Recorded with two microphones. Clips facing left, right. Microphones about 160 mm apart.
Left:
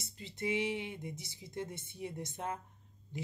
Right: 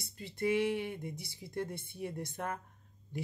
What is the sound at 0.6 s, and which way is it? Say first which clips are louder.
Speech: right 4 dB; 20° left (ahead or behind).